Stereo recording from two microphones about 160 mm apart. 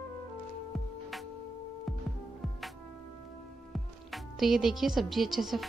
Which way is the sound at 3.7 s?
Centre (ahead or behind).